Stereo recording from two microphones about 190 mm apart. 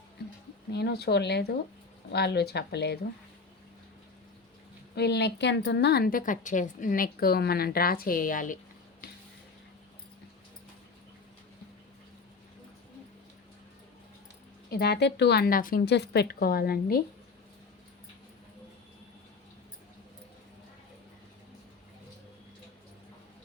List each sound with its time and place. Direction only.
0.7 s a woman's voice: 60° left (ahead or behind)
4.9 s a woman's voice: 60° left (ahead or behind); by 8.5 s 45° left (ahead or behind)
14.7 s a woman's voice: 60° left (ahead or behind)